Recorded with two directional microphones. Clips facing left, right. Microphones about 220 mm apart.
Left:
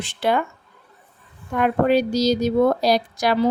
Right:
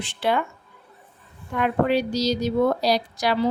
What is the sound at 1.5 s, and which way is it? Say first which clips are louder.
Speech: left 3 dB; 45° left (ahead or behind).